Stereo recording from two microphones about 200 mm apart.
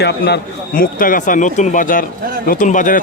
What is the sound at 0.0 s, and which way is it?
A man's voice, 50° left (ahead or behind).